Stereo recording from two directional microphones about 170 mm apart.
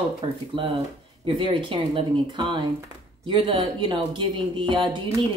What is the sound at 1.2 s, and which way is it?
A woman's voice, 30° right (ahead or behind).